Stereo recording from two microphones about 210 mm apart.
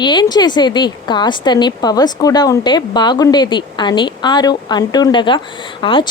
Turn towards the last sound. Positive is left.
turn(degrees=25)  # may be behind; listen again after turning